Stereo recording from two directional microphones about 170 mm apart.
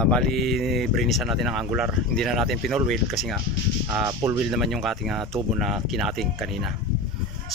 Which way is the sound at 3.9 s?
15° right (ahead or behind).